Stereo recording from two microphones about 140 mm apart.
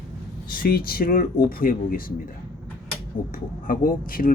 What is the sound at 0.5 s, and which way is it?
Speech, 90° left.